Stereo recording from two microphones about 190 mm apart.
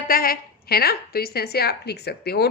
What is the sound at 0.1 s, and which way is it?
A woman's voice, 50° left (ahead or behind).